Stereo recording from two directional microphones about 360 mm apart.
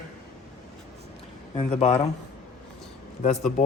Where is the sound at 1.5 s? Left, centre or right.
Centre.